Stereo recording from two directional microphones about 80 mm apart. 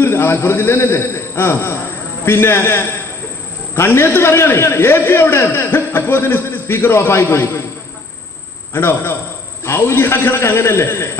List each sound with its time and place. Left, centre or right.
0.0 s a man's voice: left
8.7 s a man's voice: left